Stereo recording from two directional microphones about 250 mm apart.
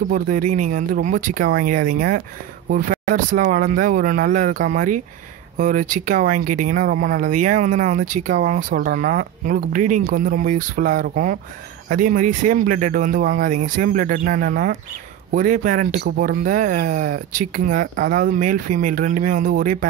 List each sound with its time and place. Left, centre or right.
0.1 s speech: right